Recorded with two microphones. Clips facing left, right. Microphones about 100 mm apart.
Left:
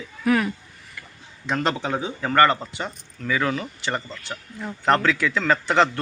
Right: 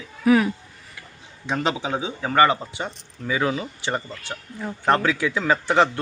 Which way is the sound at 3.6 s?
5° right (ahead or behind).